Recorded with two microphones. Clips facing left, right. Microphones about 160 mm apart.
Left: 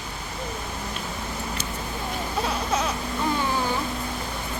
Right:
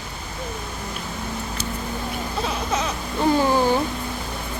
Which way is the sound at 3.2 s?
30° right (ahead or behind).